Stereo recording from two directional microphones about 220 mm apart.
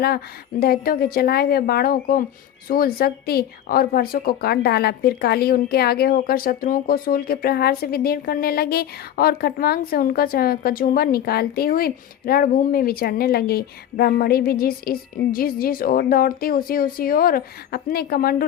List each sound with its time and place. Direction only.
0.6 s a woman's voice: 45° left (ahead or behind)